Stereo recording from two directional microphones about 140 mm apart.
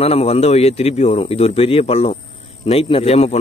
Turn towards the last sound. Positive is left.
turn(degrees=45)  # may be behind; listen again after turning